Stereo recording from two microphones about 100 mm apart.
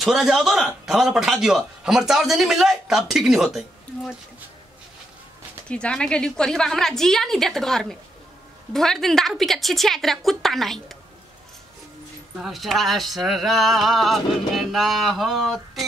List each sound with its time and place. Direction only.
0.0 s speech: centre (ahead or behind)
5.7 s speech: 10° left (ahead or behind)
12.4 s speech: centre (ahead or behind)